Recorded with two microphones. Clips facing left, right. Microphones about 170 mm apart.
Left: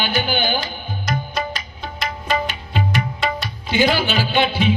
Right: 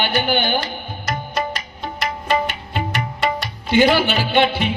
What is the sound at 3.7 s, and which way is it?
Music, 60° right (ahead or behind).